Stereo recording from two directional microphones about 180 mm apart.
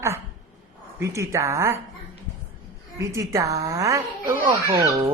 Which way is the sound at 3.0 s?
15° right (ahead or behind).